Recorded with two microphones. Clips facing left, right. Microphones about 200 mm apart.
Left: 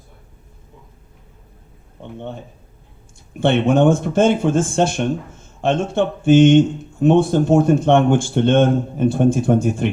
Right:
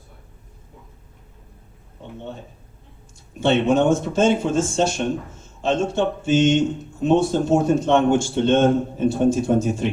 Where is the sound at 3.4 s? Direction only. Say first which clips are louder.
Left 2 dB; 55° left (ahead or behind).